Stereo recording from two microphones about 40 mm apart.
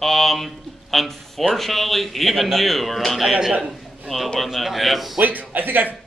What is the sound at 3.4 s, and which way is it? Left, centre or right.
Speech, centre.